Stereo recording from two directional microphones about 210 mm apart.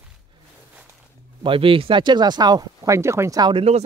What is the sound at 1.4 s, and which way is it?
Speech, 25° right (ahead or behind).